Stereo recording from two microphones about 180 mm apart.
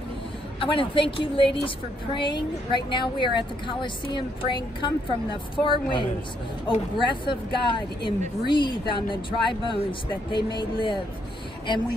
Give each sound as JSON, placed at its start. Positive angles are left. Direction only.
{"t": 0.6, "sound": "a woman's voice", "side_deg": 30}